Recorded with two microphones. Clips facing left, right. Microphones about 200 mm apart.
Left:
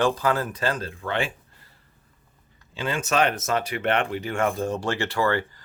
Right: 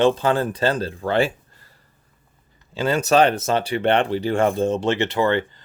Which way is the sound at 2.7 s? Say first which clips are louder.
Right 7 dB; 40° right (ahead or behind).